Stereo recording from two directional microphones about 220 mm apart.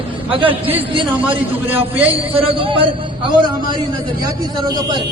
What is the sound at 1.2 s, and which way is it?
Speech, 5° right (ahead or behind).